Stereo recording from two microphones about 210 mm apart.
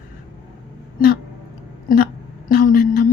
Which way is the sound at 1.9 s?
45° left (ahead or behind).